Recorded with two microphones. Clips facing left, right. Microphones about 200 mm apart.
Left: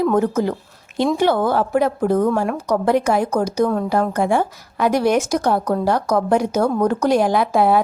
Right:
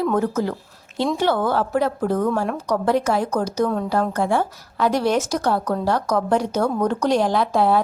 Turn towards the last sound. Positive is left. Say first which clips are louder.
# left 2 dB
turn(degrees=10)  # may be behind; listen again after turning